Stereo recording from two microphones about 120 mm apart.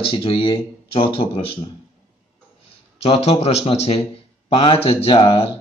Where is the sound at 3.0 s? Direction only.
55° left (ahead or behind).